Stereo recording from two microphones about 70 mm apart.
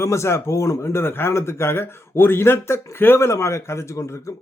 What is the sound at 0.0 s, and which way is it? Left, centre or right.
Speech, left.